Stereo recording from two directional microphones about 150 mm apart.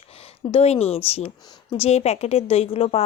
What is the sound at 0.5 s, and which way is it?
Speech, 45° left (ahead or behind).